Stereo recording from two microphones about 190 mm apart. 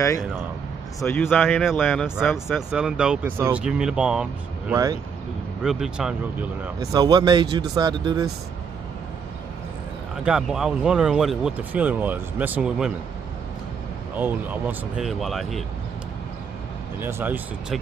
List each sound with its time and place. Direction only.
1.0 s speech: 5° left (ahead or behind)
6.8 s speech: 20° right (ahead or behind)
10.2 s speech: 5° right (ahead or behind)
14.1 s speech: 10° right (ahead or behind)
17.0 s speech: 10° right (ahead or behind)